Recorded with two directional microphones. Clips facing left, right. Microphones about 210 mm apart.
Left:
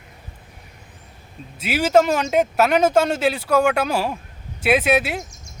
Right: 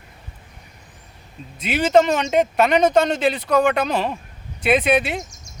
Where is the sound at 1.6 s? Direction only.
5° left (ahead or behind).